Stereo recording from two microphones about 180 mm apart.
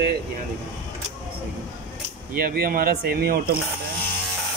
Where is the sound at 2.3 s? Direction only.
55° right (ahead or behind).